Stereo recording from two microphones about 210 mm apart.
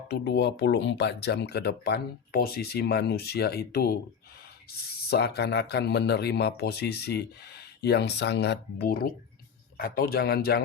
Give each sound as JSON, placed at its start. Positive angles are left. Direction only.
{"t": 0.1, "sound": "speech", "side_deg": 50}
{"t": 5.0, "sound": "speech", "side_deg": 50}